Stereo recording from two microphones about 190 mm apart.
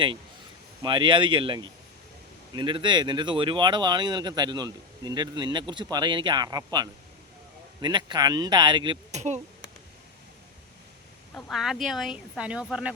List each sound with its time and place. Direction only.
0.8 s speech: 25° right (ahead or behind)
9.1 s speech: 35° right (ahead or behind)
11.3 s speech: centre (ahead or behind)